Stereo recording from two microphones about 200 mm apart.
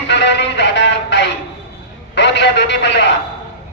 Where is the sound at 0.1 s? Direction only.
60° left (ahead or behind).